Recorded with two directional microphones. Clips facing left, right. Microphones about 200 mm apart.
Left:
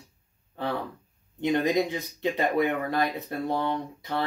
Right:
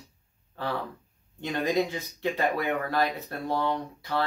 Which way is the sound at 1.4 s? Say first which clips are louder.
Left 3 dB; 20° left (ahead or behind).